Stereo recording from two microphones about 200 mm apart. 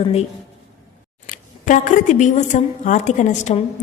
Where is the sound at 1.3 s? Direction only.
40° left (ahead or behind).